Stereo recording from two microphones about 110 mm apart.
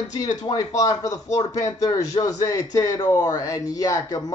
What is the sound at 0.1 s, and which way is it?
Speech, 35° left (ahead or behind).